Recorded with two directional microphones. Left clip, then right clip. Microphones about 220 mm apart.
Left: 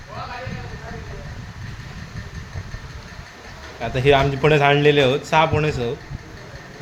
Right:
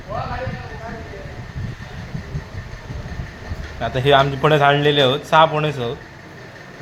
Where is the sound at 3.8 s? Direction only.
15° left (ahead or behind).